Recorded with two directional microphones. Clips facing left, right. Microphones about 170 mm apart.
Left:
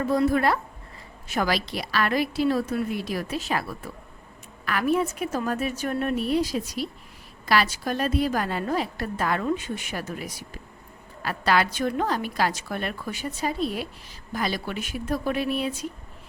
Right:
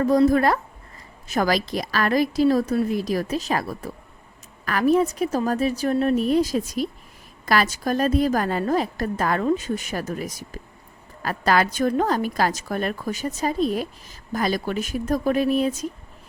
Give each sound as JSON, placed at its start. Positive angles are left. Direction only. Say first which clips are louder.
{"t": 0.0, "sound": "a woman's voice", "louder": "right 5 dB", "side_deg": -40}